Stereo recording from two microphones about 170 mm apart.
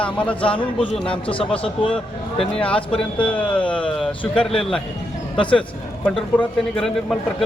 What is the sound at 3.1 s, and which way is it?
Speech, 30° left (ahead or behind).